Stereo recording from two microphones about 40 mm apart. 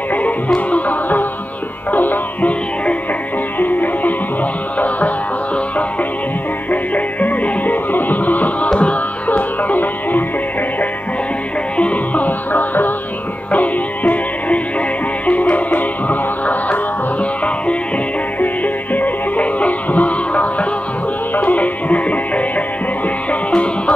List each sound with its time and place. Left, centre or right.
0.7 s music: left
3.5 s music: left
6.7 s music: left
11.7 s music: left